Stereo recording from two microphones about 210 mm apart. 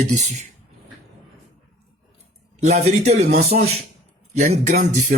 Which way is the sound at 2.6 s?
35° right (ahead or behind).